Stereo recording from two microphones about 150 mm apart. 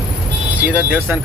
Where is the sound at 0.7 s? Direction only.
10° right (ahead or behind).